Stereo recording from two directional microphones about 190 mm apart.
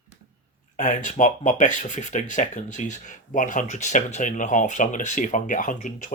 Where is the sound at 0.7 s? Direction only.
40° left (ahead or behind).